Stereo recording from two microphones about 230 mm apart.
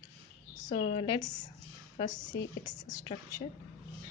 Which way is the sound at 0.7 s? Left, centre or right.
Left.